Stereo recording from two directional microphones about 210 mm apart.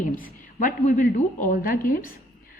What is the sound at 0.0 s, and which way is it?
A woman's voice, 40° left (ahead or behind).